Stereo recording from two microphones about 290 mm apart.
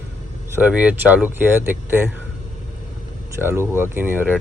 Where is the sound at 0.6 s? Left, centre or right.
Centre.